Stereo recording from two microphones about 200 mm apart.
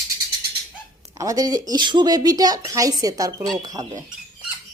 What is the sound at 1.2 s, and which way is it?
Speech, 20° right (ahead or behind).